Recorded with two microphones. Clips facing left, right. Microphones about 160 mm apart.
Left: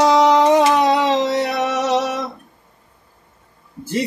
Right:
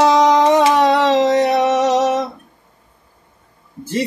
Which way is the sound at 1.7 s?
45° right (ahead or behind).